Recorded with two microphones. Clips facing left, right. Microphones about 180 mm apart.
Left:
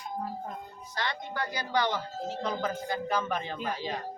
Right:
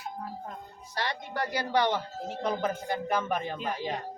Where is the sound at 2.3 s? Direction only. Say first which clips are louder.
Right 3 dB; 55° right (ahead or behind).